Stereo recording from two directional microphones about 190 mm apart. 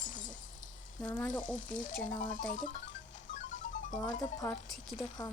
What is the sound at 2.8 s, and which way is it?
Music, 75° left (ahead or behind).